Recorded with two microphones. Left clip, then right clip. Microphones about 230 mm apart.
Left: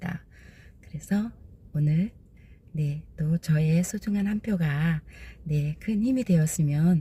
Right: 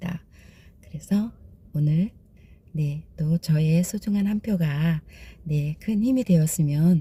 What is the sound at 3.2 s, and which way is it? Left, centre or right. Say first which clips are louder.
Speech: right 2 dB; centre.